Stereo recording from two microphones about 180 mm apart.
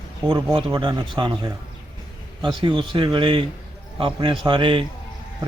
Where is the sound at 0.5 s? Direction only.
25° right (ahead or behind).